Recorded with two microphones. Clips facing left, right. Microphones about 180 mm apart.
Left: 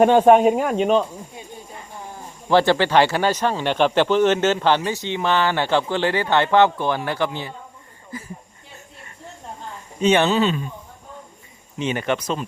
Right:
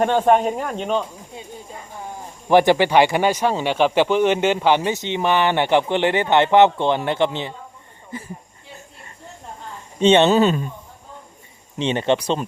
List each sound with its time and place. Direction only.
0.0 s speech: 10° left (ahead or behind)
2.5 s speech: 15° right (ahead or behind)
10.0 s speech: 25° right (ahead or behind)
10.3 s a man's voice: 45° right (ahead or behind)
11.8 s speech: 30° right (ahead or behind)